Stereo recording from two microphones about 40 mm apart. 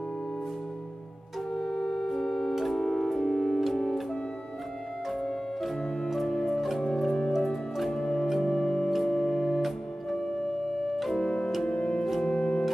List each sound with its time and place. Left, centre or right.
1.5 s organ: centre
2.8 s music: centre
5.6 s organ: centre
6.3 s music: centre
7.3 s music: centre
7.9 s music: centre
11.1 s organ: left
11.6 s music: left
12.0 s organ: centre